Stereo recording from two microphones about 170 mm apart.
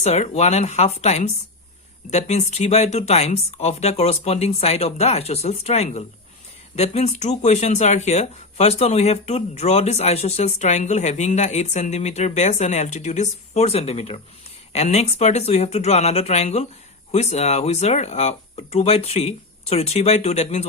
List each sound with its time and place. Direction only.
0.0 s speech: 40° left (ahead or behind)